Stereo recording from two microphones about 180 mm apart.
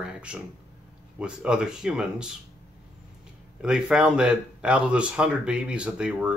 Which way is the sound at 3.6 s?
5° right (ahead or behind).